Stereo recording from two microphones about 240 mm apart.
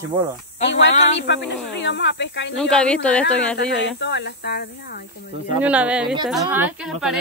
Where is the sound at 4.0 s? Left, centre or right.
Left.